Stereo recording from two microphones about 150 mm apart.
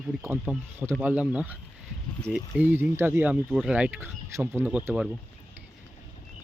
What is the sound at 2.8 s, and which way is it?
Speech, 15° right (ahead or behind).